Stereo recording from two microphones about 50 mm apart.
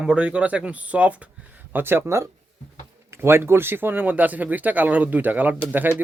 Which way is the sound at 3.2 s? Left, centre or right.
Right.